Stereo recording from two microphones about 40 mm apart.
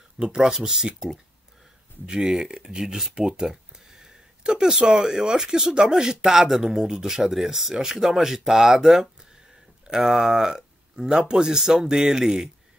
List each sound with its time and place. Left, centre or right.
0.2 s speech: centre